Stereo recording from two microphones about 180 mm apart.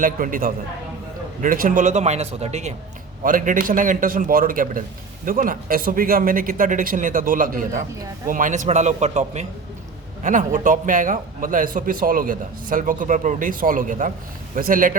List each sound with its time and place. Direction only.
0.0 s a man's voice: 50° right (ahead or behind)